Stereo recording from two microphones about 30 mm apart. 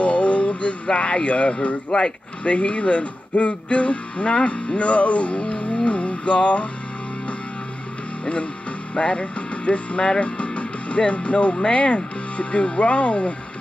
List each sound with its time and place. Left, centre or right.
0.0 s speech: left
4.7 s music: left
8.9 s music: left
10.2 s speech: left